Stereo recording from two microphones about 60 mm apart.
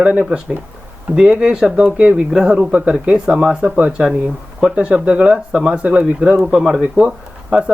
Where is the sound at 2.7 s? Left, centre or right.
Right.